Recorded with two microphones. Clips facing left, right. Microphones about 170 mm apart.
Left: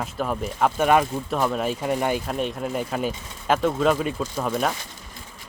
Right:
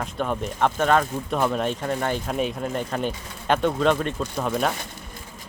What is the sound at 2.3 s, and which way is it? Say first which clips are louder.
Speech: right 1 dB; centre (ahead or behind).